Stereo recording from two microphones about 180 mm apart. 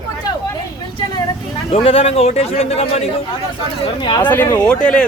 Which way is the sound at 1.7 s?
30° left (ahead or behind).